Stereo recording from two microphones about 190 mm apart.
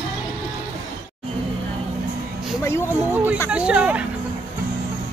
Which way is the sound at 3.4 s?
5° right (ahead or behind).